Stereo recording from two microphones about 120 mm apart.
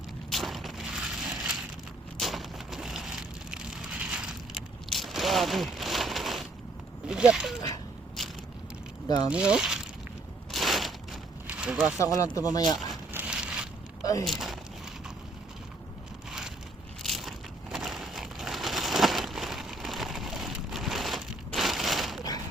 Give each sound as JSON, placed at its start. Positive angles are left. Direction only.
{"t": 0.3, "sound": "crushing", "side_deg": 0}
{"t": 2.1, "sound": "a sound", "side_deg": 0}
{"t": 4.9, "sound": "crushing", "side_deg": 0}
{"t": 7.1, "sound": "speech", "side_deg": -5}
{"t": 9.0, "sound": "speech", "side_deg": 35}
{"t": 9.3, "sound": "speech", "side_deg": -10}
{"t": 10.5, "sound": "crushing", "side_deg": 0}
{"t": 11.4, "sound": "a sound", "side_deg": -10}
{"t": 11.9, "sound": "speech", "side_deg": 25}
{"t": 13.1, "sound": "a sound", "side_deg": -10}
{"t": 14.0, "sound": "a sound", "side_deg": 30}
{"t": 14.3, "sound": "speech", "side_deg": 0}
{"t": 17.0, "sound": "crushing", "side_deg": 0}